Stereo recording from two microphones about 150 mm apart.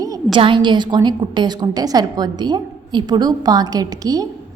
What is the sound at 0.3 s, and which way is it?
A woman's voice, 35° right (ahead or behind).